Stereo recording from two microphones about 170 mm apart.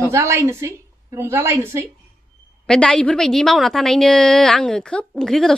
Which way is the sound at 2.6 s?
5° left (ahead or behind).